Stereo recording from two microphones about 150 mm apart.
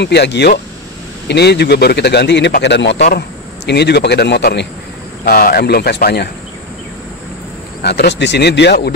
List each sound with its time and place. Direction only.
0.1 s a man's voice: 90° left
7.8 s a man's voice: 90° left